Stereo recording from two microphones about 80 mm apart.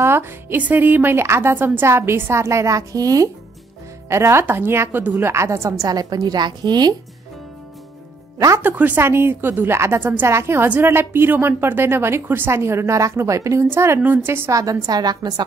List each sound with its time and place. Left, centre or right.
0.0 s a woman's voice: right
2.4 s a woman's voice: right
4.1 s a woman's voice: right
8.6 s a woman's voice: right
14.5 s a woman's voice: right